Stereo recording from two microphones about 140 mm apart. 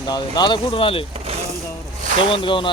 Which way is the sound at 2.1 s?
35° left (ahead or behind).